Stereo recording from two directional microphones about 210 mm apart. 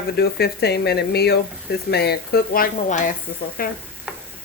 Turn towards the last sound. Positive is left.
turn(degrees=40)  # may be behind; listen again after turning